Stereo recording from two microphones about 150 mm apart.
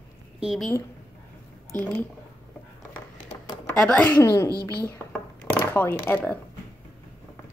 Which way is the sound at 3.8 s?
5° left (ahead or behind).